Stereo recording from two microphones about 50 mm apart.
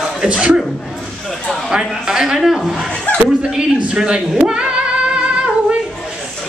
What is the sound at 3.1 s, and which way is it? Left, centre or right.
Chuckle, left.